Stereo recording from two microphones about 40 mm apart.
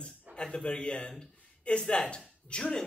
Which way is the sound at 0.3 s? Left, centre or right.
Left.